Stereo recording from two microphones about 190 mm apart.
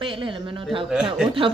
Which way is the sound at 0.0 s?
25° right (ahead or behind).